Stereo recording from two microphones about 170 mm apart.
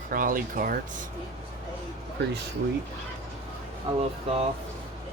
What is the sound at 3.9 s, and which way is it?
Speech, 30° right (ahead or behind).